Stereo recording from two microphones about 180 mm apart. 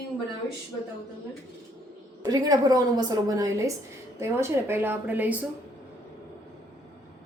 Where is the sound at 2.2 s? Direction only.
20° right (ahead or behind).